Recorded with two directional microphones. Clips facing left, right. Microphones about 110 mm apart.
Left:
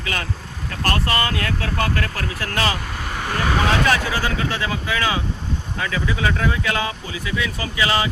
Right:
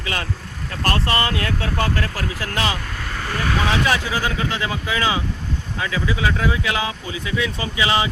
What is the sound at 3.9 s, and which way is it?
Speech, 15° right (ahead or behind).